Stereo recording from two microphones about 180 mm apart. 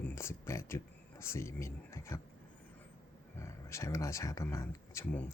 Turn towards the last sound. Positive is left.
turn(degrees=10)  # may be behind; listen again after turning